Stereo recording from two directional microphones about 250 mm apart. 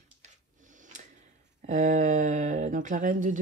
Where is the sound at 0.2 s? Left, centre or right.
Right.